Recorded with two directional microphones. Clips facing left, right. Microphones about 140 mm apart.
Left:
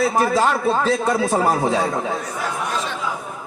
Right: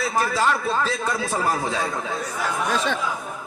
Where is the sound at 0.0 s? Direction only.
40° left (ahead or behind).